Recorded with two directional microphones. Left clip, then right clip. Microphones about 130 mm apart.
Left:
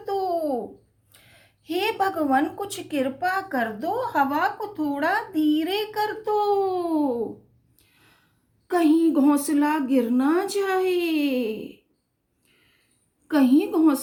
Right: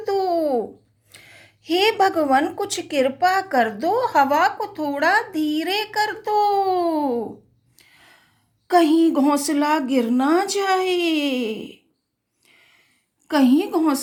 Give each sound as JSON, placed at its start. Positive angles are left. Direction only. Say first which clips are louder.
{"t": 0.0, "sound": "babbling", "louder": "right 5 dB", "side_deg": -50}
{"t": 1.1, "sound": "speech", "louder": "right 9 dB", "side_deg": -45}
{"t": 7.8, "sound": "a sound", "louder": "right 8 dB", "side_deg": -60}
{"t": 8.6, "sound": "a woman's voice", "louder": "right 4 dB", "side_deg": -55}
{"t": 13.2, "sound": "speech", "louder": "right 2 dB", "side_deg": -50}